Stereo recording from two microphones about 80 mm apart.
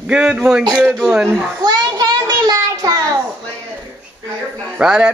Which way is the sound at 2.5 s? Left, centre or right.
Right.